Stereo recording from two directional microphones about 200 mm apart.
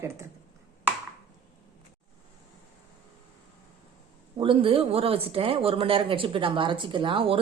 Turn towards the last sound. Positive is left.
turn(degrees=-25)  # may be behind; listen again after turning